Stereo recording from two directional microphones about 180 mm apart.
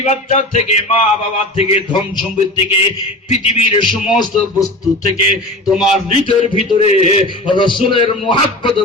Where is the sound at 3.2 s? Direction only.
35° left (ahead or behind).